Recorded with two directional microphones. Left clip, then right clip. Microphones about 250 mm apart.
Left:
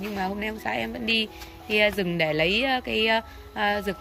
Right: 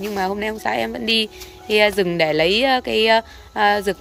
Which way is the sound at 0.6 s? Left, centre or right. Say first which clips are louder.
Right 7 dB; centre.